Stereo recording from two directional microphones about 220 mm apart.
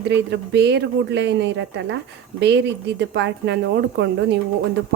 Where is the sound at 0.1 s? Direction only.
50° right (ahead or behind).